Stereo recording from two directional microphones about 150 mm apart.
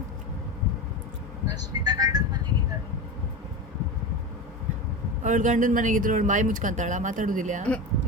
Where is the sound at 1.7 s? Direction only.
25° right (ahead or behind).